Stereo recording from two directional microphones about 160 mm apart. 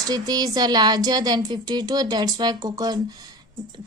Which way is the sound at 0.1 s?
25° right (ahead or behind).